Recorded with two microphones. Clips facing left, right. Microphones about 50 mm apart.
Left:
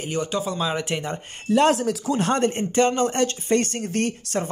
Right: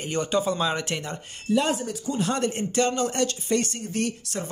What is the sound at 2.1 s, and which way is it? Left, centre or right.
Speech, left.